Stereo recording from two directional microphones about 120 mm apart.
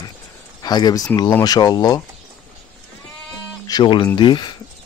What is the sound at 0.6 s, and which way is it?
Speech, 35° left (ahead or behind).